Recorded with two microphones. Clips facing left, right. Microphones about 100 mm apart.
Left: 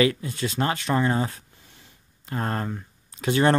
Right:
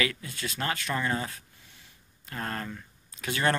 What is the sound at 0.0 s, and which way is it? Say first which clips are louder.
Speech: left 9 dB; 30° left (ahead or behind).